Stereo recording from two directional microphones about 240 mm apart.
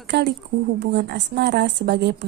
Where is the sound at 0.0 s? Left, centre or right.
Right.